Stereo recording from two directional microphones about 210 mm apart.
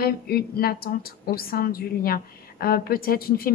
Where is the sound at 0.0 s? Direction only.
45° left (ahead or behind).